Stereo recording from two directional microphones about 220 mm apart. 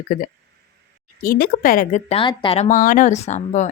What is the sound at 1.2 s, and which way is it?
Speech, 40° left (ahead or behind).